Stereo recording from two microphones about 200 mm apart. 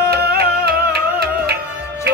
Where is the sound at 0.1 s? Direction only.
50° right (ahead or behind).